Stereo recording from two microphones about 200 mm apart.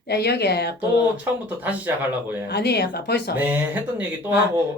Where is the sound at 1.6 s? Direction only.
10° right (ahead or behind).